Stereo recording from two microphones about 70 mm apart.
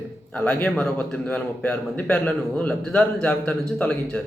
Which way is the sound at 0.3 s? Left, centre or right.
Centre.